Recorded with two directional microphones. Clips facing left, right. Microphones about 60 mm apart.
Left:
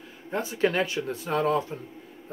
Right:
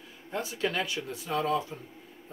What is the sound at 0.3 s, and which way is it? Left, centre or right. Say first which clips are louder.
Speech: left 6 dB; left.